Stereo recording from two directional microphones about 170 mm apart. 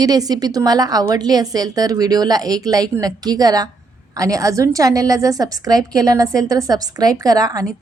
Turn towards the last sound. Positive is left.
turn(degrees=-20)  # may be behind; listen again after turning